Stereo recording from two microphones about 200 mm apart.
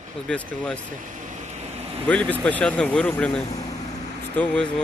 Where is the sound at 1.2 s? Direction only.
40° right (ahead or behind).